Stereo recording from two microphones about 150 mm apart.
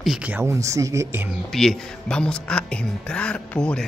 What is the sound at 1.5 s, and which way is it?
Speech, 5° left (ahead or behind).